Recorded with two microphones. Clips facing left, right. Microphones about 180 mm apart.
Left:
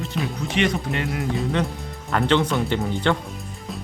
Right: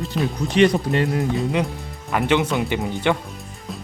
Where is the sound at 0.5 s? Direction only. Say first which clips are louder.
Right 7 dB; 35° right (ahead or behind).